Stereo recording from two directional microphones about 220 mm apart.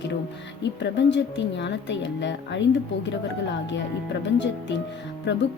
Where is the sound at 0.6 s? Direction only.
55° left (ahead or behind).